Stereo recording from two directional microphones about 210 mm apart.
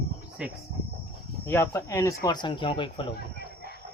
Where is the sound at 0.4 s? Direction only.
5° right (ahead or behind).